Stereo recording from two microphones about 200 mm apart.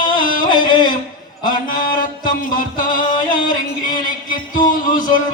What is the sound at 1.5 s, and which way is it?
Music, 45° left (ahead or behind).